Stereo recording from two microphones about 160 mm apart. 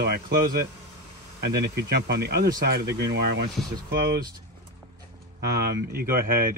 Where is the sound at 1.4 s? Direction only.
80° right.